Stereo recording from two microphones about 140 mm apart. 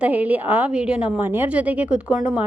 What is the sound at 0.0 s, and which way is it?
A woman's voice, 10° right (ahead or behind).